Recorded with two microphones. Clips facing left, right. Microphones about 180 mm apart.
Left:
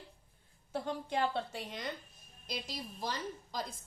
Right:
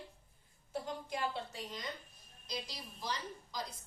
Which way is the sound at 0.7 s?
65° left (ahead or behind).